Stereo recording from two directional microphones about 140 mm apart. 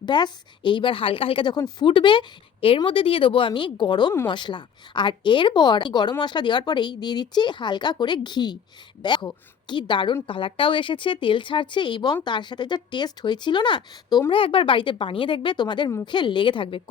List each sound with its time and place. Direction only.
0.0 s a woman's voice: 35° left (ahead or behind)